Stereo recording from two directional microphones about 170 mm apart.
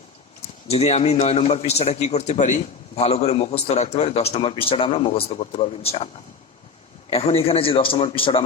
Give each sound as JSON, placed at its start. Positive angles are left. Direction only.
{"t": 0.7, "sound": "a man's voice", "side_deg": 35}
{"t": 7.1, "sound": "a man's voice", "side_deg": 35}